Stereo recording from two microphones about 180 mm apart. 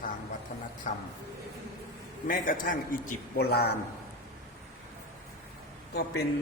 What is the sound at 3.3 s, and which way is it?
Speech, 60° left (ahead or behind).